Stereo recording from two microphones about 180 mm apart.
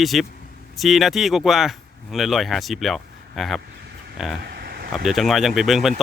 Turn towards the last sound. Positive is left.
turn(degrees=0)  # may be behind; listen again after turning